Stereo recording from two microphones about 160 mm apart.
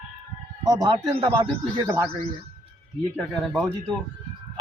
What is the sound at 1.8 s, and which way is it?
Speech, 15° right (ahead or behind).